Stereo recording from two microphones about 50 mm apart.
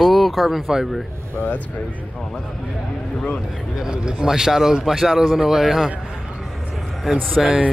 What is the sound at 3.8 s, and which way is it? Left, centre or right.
A man's voice, centre.